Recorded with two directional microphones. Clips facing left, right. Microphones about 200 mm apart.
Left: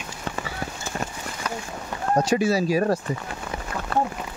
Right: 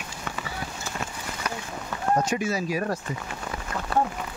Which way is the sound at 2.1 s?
35° left (ahead or behind).